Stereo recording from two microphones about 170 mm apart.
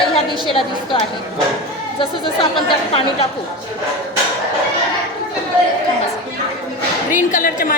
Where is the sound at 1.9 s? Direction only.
30° left (ahead or behind).